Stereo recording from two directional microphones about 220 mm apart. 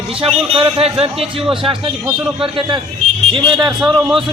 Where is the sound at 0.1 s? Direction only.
25° right (ahead or behind).